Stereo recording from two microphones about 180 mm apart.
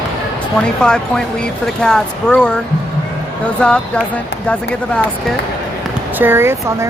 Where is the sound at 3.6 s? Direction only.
5° left (ahead or behind).